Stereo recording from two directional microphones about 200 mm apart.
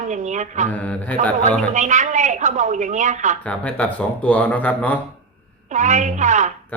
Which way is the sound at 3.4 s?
5° left (ahead or behind).